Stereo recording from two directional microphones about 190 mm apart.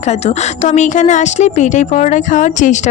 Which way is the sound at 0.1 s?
35° left (ahead or behind).